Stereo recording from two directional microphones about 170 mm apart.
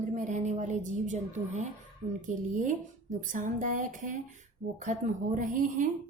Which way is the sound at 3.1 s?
50° right (ahead or behind).